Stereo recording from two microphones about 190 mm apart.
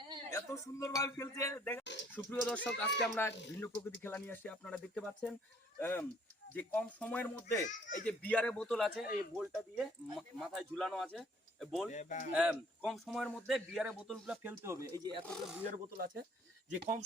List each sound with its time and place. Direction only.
0.3 s speech: 15° left (ahead or behind)
11.9 s speech: 40° left (ahead or behind)
12.3 s speech: 5° right (ahead or behind)
15.2 s speech: 5° left (ahead or behind)
15.7 s speech: 50° right (ahead or behind)